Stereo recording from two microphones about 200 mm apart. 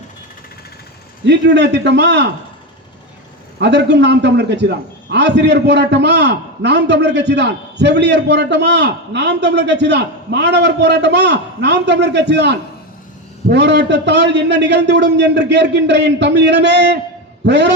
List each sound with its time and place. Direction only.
1.2 s a man's voice: 60° right (ahead or behind)
3.6 s a man's voice: 60° right (ahead or behind)